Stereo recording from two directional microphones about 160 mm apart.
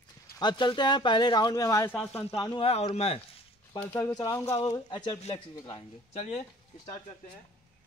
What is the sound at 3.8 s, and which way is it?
Speech, 15° left (ahead or behind).